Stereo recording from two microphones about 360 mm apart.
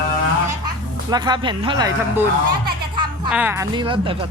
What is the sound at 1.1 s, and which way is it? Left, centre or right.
Speech, centre.